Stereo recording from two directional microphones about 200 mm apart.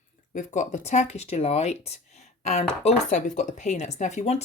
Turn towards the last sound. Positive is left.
turn(degrees=35)  # may be behind; listen again after turning